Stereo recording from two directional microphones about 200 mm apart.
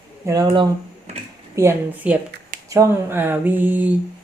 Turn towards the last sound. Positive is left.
turn(degrees=-10)  # may be behind; listen again after turning